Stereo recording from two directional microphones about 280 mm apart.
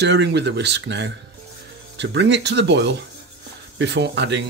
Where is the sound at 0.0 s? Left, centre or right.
Right.